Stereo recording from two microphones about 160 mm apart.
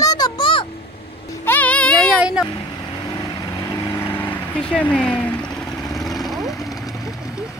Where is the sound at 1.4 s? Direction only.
10° left (ahead or behind).